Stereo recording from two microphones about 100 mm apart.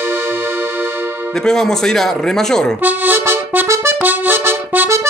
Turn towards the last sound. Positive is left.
turn(degrees=-25)  # may be behind; listen again after turning